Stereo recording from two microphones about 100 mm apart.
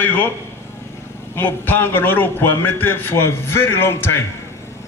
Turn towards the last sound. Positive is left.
turn(degrees=25)  # may be behind; listen again after turning